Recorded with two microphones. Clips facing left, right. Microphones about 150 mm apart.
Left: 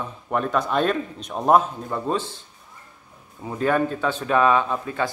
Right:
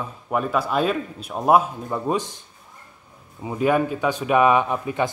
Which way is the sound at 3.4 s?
10° right (ahead or behind).